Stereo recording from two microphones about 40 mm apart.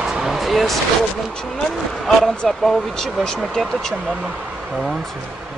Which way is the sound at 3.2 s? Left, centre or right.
Centre.